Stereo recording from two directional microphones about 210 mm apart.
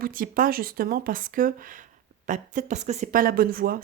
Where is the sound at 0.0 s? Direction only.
40° right (ahead or behind).